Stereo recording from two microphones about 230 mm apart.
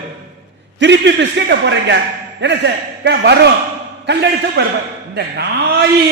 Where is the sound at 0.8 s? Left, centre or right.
Right.